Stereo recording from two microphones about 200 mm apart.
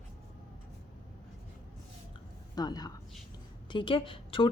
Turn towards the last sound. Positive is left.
turn(degrees=25)  # may be behind; listen again after turning